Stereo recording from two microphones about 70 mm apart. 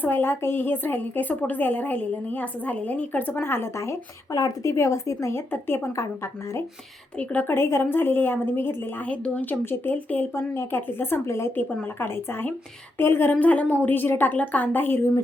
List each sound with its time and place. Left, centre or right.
0.0 s a woman's voice: left
3.4 s speech: left
5.5 s a woman's voice: left
7.2 s a woman's voice: left
7.5 s a woman's voice: left
9.0 s a woman's voice: left
10.3 s a woman's voice: left
13.4 s a woman's voice: left